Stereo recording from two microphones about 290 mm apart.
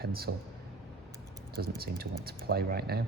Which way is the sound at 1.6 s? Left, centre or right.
Right.